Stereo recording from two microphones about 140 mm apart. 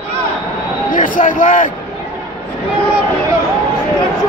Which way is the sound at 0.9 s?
70° left (ahead or behind).